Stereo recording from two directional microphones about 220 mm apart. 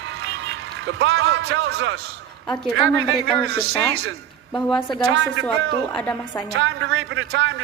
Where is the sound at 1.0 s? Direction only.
50° right (ahead or behind).